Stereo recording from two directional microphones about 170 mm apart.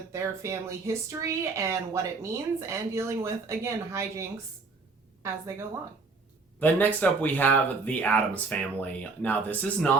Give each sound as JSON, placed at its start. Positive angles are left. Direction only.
{"t": 0.1, "sound": "speech", "side_deg": -15}
{"t": 6.6, "sound": "speech", "side_deg": 10}